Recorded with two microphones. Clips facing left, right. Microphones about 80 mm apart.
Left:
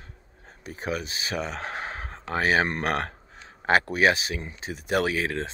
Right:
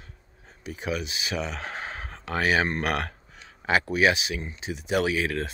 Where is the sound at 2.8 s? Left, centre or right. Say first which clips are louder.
Left 1 dB; left.